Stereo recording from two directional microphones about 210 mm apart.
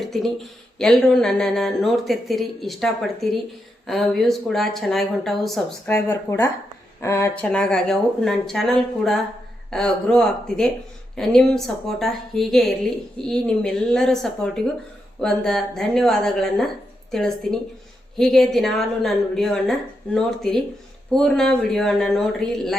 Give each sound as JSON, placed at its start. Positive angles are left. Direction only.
{"t": 0.0, "sound": "speech", "side_deg": 0}
{"t": 5.9, "sound": "speech", "side_deg": 15}